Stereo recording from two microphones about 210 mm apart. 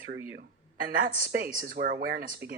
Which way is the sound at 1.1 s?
30° left (ahead or behind).